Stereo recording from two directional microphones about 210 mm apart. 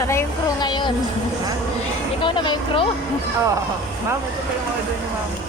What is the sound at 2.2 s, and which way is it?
Speech, 20° left (ahead or behind).